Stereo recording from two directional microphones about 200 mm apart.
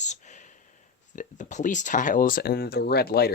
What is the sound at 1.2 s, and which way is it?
Speech, 40° left (ahead or behind).